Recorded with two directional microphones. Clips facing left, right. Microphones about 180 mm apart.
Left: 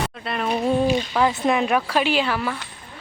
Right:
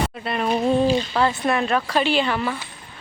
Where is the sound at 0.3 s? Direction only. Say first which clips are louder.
Right 2 dB; centre (ahead or behind).